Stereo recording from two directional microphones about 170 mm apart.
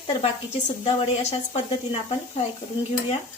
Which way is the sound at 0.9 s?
40° left (ahead or behind).